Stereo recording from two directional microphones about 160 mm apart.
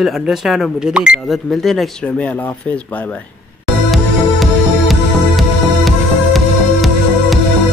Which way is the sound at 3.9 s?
Centre (ahead or behind).